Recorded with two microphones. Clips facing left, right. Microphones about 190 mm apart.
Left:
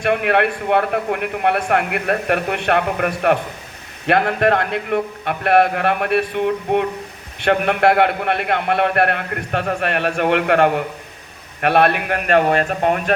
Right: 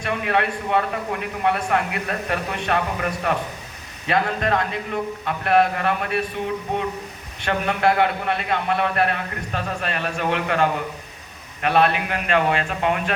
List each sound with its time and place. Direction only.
0.0 s a man's voice: 65° left (ahead or behind); by 13.1 s 50° left (ahead or behind)